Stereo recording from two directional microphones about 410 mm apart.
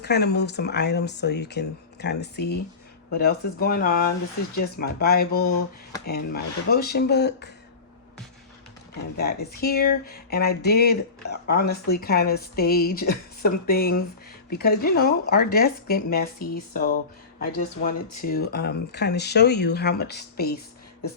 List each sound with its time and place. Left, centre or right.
0.0 s speech: left
9.1 s speech: left